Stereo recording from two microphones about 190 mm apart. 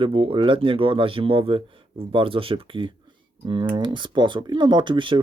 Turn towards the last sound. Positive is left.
turn(degrees=-25)  # may be behind; listen again after turning